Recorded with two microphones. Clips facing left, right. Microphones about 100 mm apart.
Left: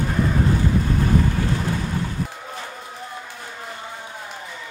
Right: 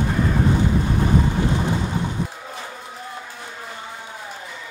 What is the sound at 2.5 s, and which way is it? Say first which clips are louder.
Run: even; centre (ahead or behind).